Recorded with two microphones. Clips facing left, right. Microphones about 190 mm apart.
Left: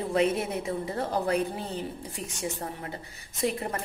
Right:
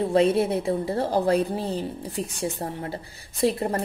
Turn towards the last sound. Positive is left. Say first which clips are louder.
# right 6 dB
turn(degrees=-35)  # may be behind; listen again after turning